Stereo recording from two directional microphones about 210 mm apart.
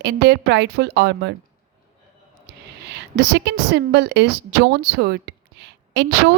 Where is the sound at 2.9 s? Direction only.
55° right (ahead or behind).